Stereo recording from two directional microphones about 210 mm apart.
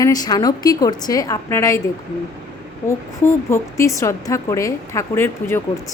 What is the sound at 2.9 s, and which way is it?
A woman's voice, 10° left (ahead or behind).